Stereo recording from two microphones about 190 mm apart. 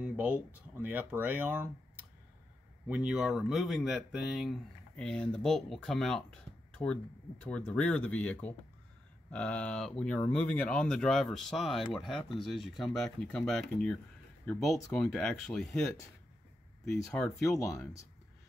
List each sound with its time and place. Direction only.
0.0 s a sound: 5° right (ahead or behind)
0.7 s speech: 10° right (ahead or behind)
17.6 s speech: 15° left (ahead or behind)